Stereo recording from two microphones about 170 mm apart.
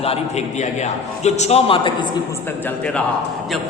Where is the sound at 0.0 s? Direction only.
40° left (ahead or behind).